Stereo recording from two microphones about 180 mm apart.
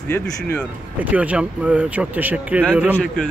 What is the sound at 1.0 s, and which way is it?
Speech, 10° right (ahead or behind).